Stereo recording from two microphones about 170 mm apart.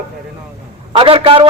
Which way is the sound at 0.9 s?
30° right (ahead or behind).